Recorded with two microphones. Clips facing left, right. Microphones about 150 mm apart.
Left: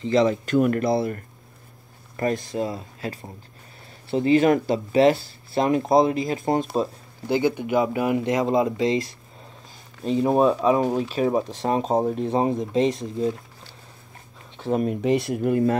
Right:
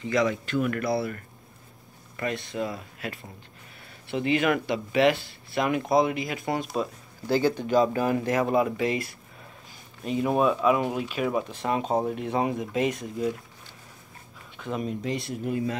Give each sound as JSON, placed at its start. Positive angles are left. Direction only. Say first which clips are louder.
{"t": 0.0, "sound": "speech", "louder": "left 5 dB", "side_deg": 30}
{"t": 0.5, "sound": "speech", "louder": "left 6 dB", "side_deg": 40}
{"t": 7.2, "sound": "speech", "louder": "left 2 dB", "side_deg": 15}
{"t": 10.0, "sound": "speech", "louder": "left 4 dB", "side_deg": 35}
{"t": 14.6, "sound": "speech", "louder": "left 8 dB", "side_deg": 40}
{"t": 14.9, "sound": "speech", "louder": "left 8 dB", "side_deg": 65}